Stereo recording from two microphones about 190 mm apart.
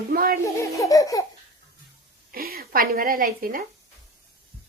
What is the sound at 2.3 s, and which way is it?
A woman's voice, 50° right (ahead or behind).